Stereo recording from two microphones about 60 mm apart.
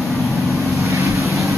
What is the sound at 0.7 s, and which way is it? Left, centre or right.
Vehicle, right.